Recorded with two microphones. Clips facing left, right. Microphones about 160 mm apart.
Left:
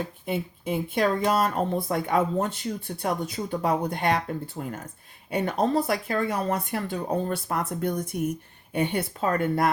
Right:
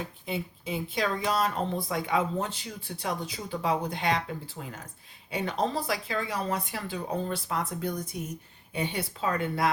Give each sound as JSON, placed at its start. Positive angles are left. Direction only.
{"t": 0.3, "sound": "speech", "side_deg": 55}
{"t": 5.3, "sound": "speech", "side_deg": 55}